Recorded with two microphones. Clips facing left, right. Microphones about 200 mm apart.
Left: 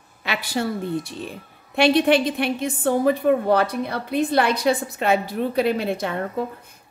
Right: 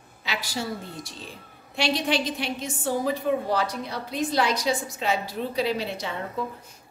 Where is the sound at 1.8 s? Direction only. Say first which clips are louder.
Left 8 dB; 60° left (ahead or behind).